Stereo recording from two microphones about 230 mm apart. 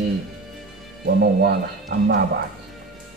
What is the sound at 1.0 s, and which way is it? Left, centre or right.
A man's voice, right.